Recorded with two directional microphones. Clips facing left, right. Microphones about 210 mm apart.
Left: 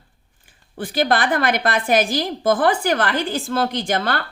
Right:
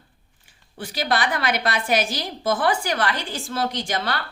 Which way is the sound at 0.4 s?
50° left (ahead or behind).